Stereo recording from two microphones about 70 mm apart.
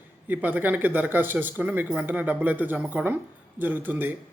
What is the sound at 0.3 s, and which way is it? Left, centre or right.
Speech, right.